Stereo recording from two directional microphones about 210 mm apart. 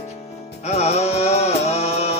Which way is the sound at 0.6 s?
30° left (ahead or behind).